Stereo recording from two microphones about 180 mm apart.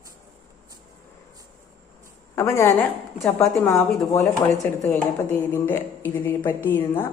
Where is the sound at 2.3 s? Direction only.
15° left (ahead or behind).